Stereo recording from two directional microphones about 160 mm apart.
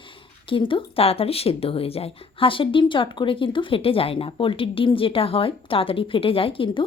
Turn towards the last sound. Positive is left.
turn(degrees=35)  # may be behind; listen again after turning